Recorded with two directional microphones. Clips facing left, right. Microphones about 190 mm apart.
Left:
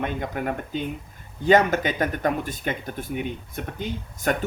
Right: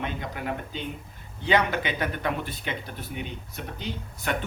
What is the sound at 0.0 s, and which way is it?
Speech, 50° left (ahead or behind).